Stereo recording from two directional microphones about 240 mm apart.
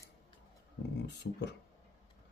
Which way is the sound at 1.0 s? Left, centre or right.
Left.